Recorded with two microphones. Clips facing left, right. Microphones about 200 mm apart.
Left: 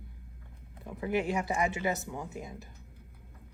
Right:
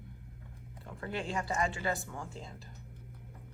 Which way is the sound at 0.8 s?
20° left (ahead or behind).